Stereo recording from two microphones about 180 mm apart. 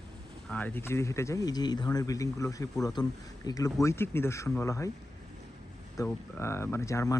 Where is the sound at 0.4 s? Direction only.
10° left (ahead or behind).